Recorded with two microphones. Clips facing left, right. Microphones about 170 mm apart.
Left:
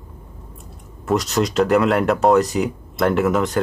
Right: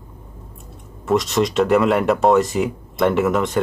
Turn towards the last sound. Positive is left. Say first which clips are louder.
# even
turn(degrees=0)  # may be behind; listen again after turning